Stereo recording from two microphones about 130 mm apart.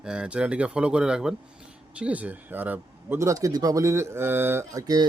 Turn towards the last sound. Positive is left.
turn(degrees=-25)  # may be behind; listen again after turning